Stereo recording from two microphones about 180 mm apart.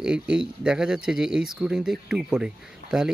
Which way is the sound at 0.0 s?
5° right (ahead or behind).